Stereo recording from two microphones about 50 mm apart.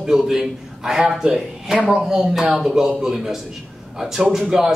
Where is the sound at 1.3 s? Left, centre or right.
Centre.